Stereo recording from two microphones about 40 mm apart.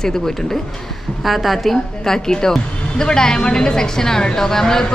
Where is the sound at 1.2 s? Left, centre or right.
Centre.